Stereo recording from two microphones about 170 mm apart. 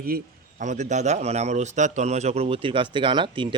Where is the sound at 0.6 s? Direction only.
45° right (ahead or behind).